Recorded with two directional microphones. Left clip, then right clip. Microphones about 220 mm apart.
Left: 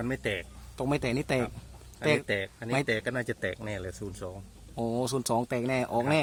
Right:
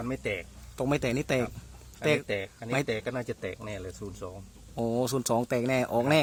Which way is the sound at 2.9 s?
45° left (ahead or behind).